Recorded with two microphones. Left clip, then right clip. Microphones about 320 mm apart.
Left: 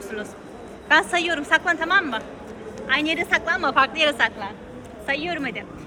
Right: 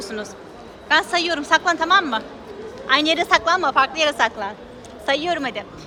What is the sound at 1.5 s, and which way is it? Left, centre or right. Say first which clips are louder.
A woman's voice: right 3 dB; centre.